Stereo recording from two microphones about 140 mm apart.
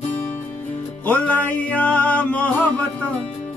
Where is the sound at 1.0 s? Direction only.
10° left (ahead or behind).